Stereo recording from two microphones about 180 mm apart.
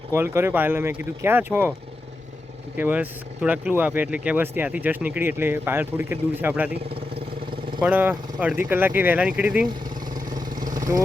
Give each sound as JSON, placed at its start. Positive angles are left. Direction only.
{"t": 0.1, "sound": "speech", "side_deg": -15}
{"t": 2.7, "sound": "speech", "side_deg": -10}
{"t": 7.8, "sound": "speech", "side_deg": -10}
{"t": 10.5, "sound": "vehicle", "side_deg": -50}
{"t": 10.8, "sound": "vehicle", "side_deg": -20}